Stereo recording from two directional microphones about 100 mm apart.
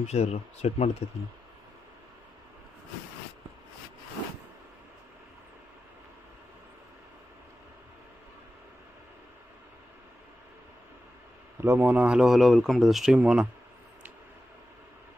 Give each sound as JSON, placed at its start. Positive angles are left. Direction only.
{"t": 0.0, "sound": "speech", "side_deg": 90}
{"t": 11.6, "sound": "speech", "side_deg": -20}